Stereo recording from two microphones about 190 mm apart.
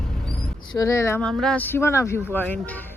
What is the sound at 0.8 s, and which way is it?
Speech, 15° left (ahead or behind).